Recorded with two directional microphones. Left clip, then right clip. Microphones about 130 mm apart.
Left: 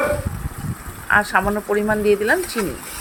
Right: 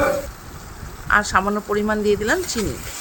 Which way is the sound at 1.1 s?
10° right (ahead or behind).